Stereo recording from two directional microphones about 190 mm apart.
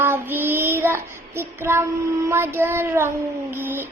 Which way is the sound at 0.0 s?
10° right (ahead or behind).